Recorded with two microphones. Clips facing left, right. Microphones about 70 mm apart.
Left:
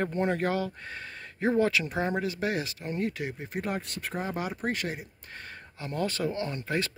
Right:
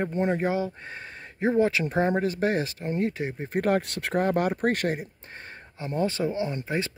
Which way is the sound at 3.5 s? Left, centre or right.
Right.